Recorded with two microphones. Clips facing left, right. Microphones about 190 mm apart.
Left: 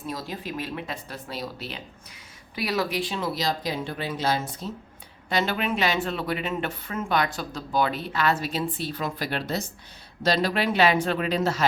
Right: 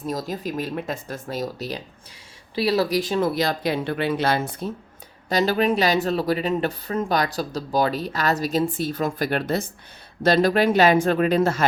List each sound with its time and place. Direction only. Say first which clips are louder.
0.0 s speech: right 6 dB; 45° right (ahead or behind); by 4.7 s 60° right (ahead or behind)
5.3 s speech: right 6 dB; 40° right (ahead or behind)